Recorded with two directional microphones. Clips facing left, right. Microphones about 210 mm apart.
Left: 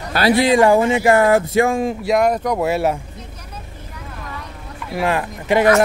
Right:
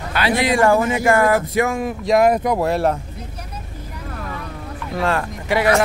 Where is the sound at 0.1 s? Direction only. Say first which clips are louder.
Left 4 dB; 35° left (ahead or behind).